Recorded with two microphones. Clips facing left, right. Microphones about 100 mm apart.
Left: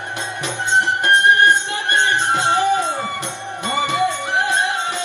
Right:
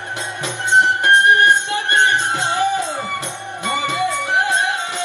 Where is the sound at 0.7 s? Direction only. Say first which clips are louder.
Right 3 dB; 20° right (ahead or behind).